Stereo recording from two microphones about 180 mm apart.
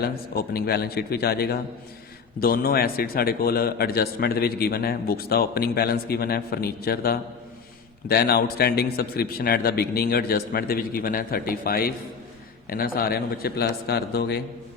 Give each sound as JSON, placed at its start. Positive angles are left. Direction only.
{"t": 0.0, "sound": "a man's voice", "side_deg": 60}